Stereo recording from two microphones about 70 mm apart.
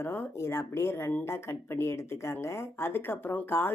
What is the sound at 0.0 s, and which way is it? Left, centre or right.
Speech, left.